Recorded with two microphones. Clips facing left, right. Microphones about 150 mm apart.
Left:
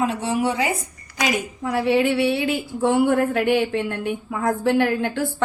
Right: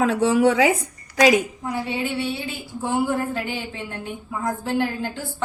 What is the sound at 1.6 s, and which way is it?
A woman's voice, 75° left (ahead or behind).